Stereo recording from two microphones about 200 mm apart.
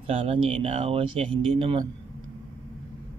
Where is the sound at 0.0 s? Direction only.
30° right (ahead or behind).